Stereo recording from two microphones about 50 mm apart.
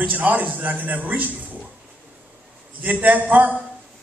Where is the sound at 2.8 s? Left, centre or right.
Right.